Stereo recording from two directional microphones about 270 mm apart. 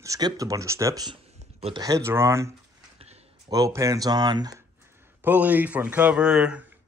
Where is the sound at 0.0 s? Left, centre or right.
Centre.